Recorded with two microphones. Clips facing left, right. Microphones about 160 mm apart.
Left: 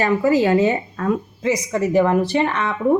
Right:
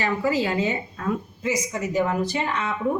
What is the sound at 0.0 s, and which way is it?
Speech, 45° left (ahead or behind).